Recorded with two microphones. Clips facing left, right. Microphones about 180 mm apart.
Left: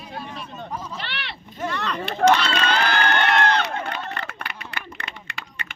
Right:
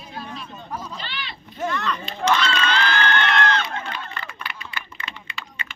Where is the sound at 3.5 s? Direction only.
65° left (ahead or behind).